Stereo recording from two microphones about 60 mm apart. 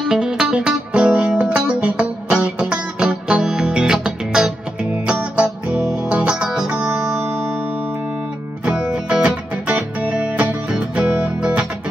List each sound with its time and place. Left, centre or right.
0.0 s music: centre
8.6 s music: centre